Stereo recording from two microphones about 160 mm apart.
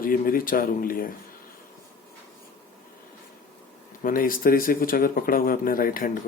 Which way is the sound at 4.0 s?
60° left (ahead or behind).